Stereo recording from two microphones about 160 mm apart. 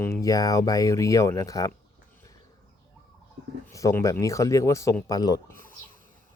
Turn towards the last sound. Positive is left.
turn(degrees=15)  # may be behind; listen again after turning